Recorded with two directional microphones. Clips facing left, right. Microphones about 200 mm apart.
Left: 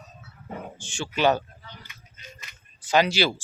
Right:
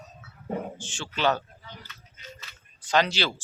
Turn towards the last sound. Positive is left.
turn(degrees=10)  # may be behind; listen again after turning